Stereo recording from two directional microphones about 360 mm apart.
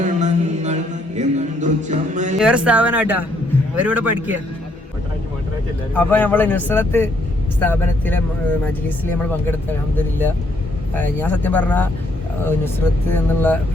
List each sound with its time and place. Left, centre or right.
0.0 s music: centre
2.4 s speech: centre
5.9 s speech: centre
10.9 s speech: centre